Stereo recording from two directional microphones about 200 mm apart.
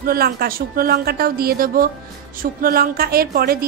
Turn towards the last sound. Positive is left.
turn(degrees=-50)  # may be behind; listen again after turning